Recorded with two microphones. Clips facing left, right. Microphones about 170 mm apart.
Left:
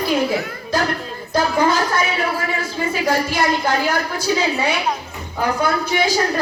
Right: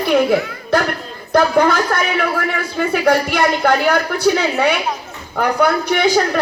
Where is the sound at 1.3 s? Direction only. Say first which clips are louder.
Right 4 dB; 60° right (ahead or behind).